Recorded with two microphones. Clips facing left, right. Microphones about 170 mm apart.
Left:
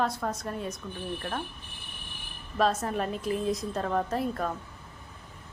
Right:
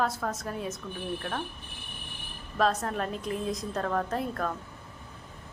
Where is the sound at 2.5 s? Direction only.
Centre (ahead or behind).